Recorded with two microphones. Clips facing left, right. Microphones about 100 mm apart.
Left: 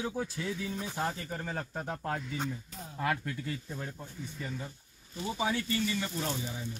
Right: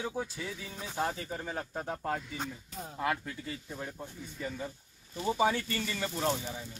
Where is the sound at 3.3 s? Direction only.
5° right (ahead or behind).